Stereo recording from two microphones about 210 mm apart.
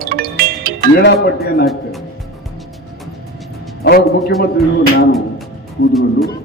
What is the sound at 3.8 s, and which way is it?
A man's voice, 50° left (ahead or behind).